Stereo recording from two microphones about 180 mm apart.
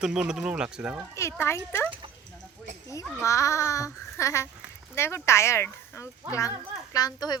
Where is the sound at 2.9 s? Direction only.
15° left (ahead or behind).